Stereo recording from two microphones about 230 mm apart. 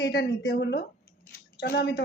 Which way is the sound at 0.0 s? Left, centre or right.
Left.